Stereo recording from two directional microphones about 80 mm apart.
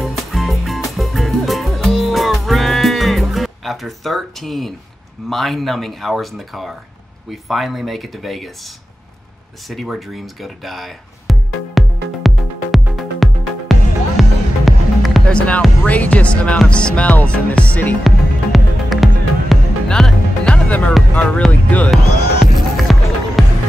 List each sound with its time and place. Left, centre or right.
0.0 s music: centre
5.3 s speech: centre
9.7 s speech: centre
12.7 s music: centre
15.2 s music: centre
18.0 s music: centre
19.9 s speech: centre
21.1 s music: centre
21.9 s music: centre